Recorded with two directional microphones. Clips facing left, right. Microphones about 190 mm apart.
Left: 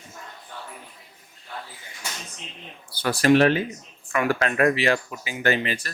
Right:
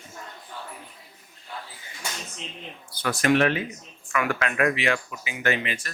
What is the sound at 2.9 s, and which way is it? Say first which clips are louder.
Speech: left 4 dB; 35° left (ahead or behind).